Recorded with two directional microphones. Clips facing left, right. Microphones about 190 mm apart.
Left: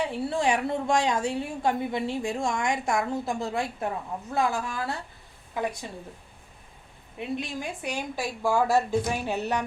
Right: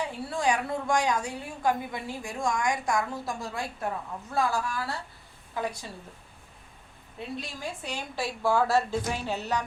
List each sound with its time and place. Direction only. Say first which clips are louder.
0.0 s a woman's voice: left 3 dB; 25° left (ahead or behind)
7.2 s a woman's voice: left 5 dB; 20° left (ahead or behind)